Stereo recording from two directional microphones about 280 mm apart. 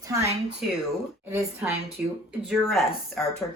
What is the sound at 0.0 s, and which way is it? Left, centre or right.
A woman's voice, centre.